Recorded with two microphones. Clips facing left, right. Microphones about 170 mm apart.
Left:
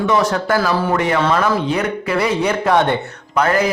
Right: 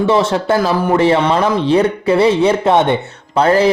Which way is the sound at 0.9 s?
30° right (ahead or behind).